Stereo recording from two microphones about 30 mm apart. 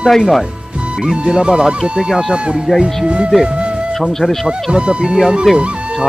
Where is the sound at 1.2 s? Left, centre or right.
Right.